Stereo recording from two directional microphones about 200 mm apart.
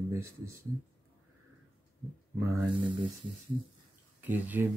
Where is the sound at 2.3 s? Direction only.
10° right (ahead or behind).